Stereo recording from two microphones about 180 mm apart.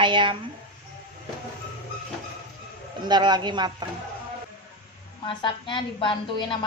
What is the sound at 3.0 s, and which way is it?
Speech, 25° right (ahead or behind).